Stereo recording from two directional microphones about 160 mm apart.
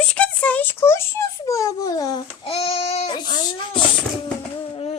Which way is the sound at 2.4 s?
40° left (ahead or behind).